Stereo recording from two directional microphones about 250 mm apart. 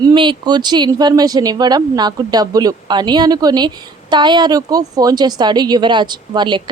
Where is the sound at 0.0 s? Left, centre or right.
Centre.